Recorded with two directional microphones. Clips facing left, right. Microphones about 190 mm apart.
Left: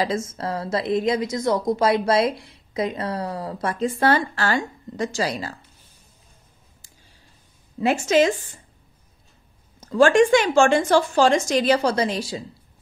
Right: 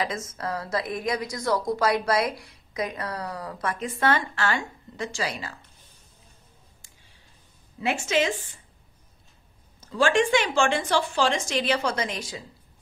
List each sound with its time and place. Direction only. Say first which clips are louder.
0.0 s a woman's voice: left 5 dB; 30° left (ahead or behind)
7.8 s speech: left 7 dB; 40° left (ahead or behind)
9.8 s a woman's voice: left 7 dB; 45° left (ahead or behind)